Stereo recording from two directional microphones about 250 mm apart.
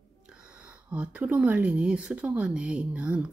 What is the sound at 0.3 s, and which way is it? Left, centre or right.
Speech, centre.